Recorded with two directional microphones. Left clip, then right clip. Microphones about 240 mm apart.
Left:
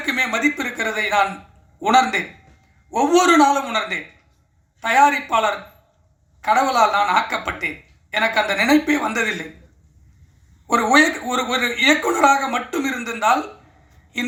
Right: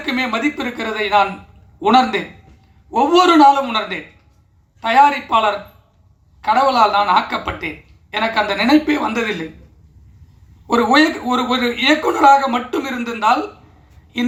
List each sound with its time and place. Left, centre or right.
0.0 s speech: left
10.7 s speech: left